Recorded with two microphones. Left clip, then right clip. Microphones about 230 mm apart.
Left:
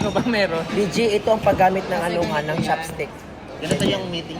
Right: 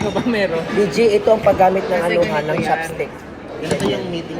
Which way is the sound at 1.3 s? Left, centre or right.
Centre.